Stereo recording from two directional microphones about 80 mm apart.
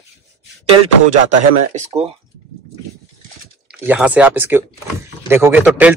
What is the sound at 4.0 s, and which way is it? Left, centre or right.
Speech, centre.